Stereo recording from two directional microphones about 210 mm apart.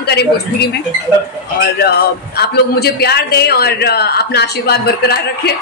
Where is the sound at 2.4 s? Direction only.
50° left (ahead or behind).